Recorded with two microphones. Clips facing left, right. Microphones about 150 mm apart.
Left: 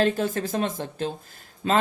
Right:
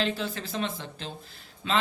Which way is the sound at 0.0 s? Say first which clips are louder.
Left 7 dB; 50° left (ahead or behind).